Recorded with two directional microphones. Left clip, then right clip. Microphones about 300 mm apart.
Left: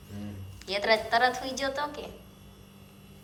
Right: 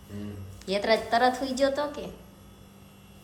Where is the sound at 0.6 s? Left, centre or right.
Centre.